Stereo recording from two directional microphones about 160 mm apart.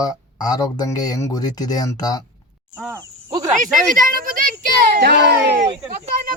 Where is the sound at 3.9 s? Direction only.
60° right (ahead or behind); by 5.5 s 90° right.